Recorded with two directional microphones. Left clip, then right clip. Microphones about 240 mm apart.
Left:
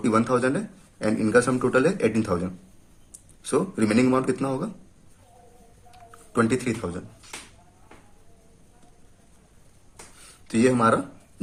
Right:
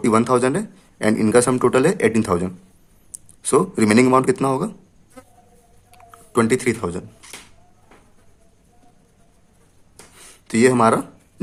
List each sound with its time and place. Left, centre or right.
0.0 s a man's voice: right
6.3 s a man's voice: right
10.4 s speech: right